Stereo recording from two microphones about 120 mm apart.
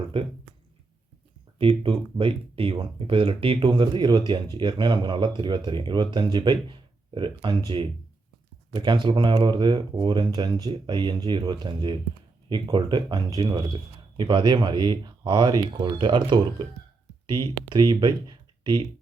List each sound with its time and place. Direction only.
0.1 s speech: 45° right (ahead or behind)
1.5 s speech: 50° right (ahead or behind)